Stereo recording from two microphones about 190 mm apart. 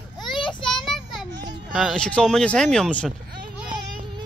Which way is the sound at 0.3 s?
25° left (ahead or behind).